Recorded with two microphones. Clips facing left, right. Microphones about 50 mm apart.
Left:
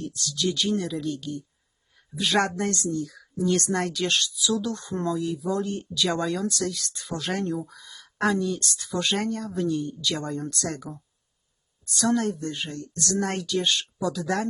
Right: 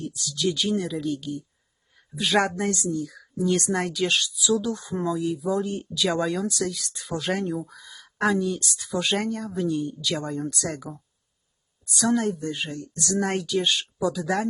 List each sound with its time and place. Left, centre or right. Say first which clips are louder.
0.0 s speech: right 1 dB; centre